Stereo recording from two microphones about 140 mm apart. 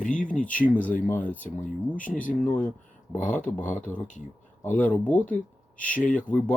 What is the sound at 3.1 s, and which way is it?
Speech, 65° left (ahead or behind).